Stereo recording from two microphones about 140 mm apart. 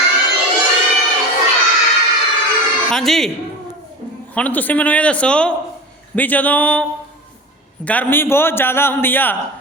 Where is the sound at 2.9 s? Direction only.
Centre (ahead or behind).